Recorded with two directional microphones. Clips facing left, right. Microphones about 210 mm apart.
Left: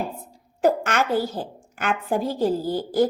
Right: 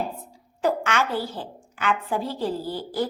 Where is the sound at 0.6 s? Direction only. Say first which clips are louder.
Left 3 dB; 45° left (ahead or behind).